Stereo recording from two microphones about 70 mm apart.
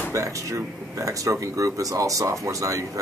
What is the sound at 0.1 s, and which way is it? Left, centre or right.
Speech, right.